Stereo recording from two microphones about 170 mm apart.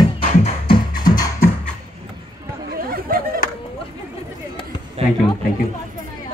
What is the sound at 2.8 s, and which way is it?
Chatter, 60° right (ahead or behind).